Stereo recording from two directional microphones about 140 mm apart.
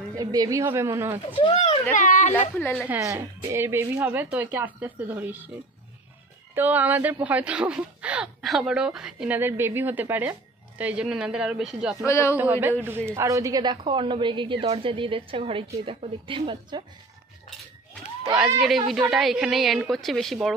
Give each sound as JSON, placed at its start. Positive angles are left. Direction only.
{"t": 0.1, "sound": "a woman's voice", "side_deg": -25}
{"t": 1.3, "sound": "speech", "side_deg": 35}
{"t": 2.0, "sound": "speech", "side_deg": 65}
{"t": 2.9, "sound": "speech", "side_deg": -20}
{"t": 6.5, "sound": "a woman's voice", "side_deg": -10}
{"t": 12.1, "sound": "speech", "side_deg": 20}
{"t": 12.4, "sound": "a woman's voice", "side_deg": -15}
{"t": 18.6, "sound": "a woman's voice", "side_deg": 0}